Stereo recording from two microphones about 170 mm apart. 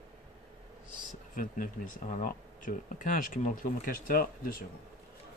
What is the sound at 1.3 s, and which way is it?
Speech, 55° left (ahead or behind).